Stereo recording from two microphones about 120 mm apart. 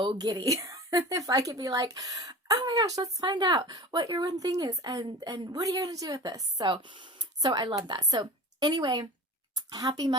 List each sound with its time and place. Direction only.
0.0 s speech: 40° right (ahead or behind)